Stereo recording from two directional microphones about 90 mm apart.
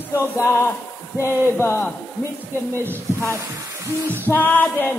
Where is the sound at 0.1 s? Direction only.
25° left (ahead or behind).